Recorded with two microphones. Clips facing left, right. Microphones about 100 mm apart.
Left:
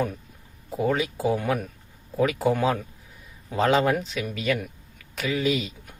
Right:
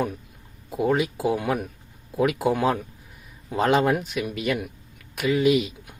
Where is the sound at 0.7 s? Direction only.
5° right (ahead or behind).